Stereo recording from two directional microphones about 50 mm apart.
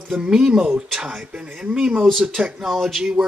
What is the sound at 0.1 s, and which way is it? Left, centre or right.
Speech, centre.